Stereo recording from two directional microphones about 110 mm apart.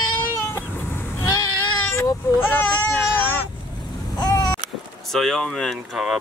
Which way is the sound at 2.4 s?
20° left (ahead or behind).